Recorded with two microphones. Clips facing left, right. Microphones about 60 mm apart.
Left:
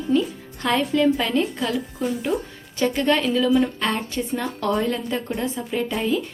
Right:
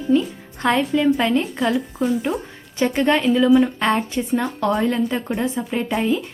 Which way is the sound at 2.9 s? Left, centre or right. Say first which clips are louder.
Right 3 dB; right.